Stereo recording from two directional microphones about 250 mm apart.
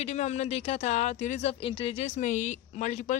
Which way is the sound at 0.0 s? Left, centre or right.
Left.